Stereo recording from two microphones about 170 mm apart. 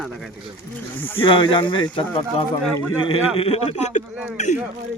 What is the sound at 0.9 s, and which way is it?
Speech, 10° left (ahead or behind).